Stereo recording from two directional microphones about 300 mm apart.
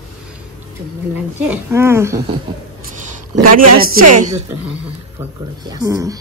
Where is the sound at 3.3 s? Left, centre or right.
Right.